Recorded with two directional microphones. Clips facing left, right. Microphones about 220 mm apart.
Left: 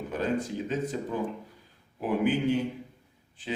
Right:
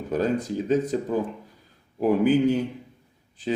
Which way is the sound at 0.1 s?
40° right (ahead or behind).